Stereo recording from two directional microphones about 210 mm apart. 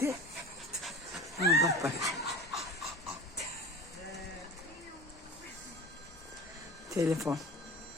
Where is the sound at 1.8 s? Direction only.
15° right (ahead or behind).